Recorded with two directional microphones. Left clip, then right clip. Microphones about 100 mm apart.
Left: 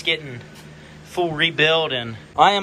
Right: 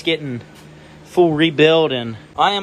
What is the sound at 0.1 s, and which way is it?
Speech, 65° right (ahead or behind).